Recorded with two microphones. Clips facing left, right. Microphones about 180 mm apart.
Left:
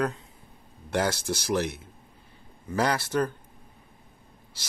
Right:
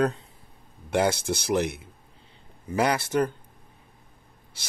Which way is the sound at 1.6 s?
60° right (ahead or behind).